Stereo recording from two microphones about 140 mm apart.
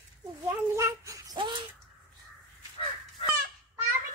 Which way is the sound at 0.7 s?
20° right (ahead or behind).